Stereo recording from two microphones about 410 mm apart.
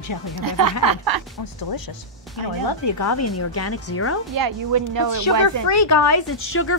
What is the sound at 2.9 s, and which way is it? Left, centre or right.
Speech, left.